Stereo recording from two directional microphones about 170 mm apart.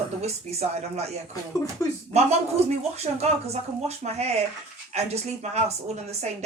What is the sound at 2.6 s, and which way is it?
Speech, 40° right (ahead or behind).